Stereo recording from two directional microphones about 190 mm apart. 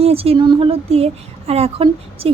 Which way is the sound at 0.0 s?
30° right (ahead or behind).